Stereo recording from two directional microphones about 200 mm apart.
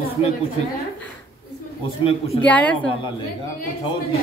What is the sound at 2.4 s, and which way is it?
Speech, 5° left (ahead or behind).